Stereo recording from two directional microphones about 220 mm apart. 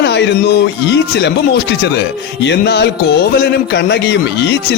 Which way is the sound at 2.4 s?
50° left (ahead or behind).